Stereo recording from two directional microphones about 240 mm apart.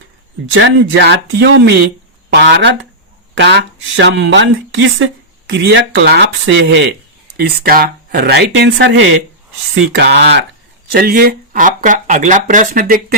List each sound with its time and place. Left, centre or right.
0.5 s speech: right